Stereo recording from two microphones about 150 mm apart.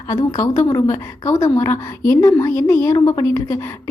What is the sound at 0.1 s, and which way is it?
A woman's voice, 25° left (ahead or behind).